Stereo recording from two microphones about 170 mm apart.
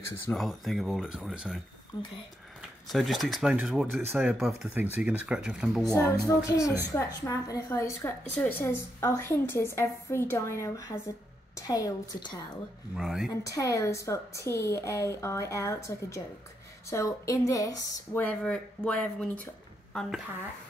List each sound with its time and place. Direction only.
0.3 s speech: centre (ahead or behind)
2.9 s speech: centre (ahead or behind)
5.9 s a woman's voice: 20° left (ahead or behind)
12.9 s speech: centre (ahead or behind)
13.5 s a woman's voice: 20° left (ahead or behind)
18.2 s a woman's voice: 5° left (ahead or behind)